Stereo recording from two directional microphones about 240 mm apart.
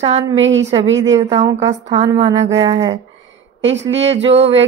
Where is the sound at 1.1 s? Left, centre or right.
Right.